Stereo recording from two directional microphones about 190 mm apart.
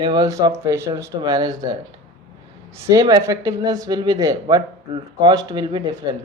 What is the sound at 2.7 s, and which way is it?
Speech, 15° right (ahead or behind).